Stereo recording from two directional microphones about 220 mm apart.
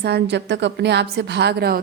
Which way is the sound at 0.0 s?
50° right (ahead or behind).